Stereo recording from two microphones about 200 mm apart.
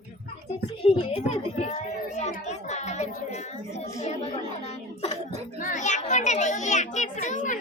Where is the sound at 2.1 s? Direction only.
35° left (ahead or behind).